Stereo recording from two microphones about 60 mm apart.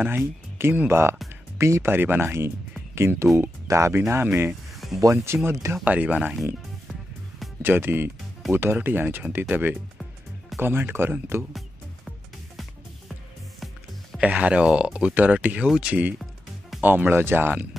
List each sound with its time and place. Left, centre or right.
0.1 s speech: right
3.6 s speech: right
4.1 s speech: right
4.7 s a sound: centre
5.1 s speech: right
5.9 s speech: right
7.6 s speech: right
14.2 s speech: right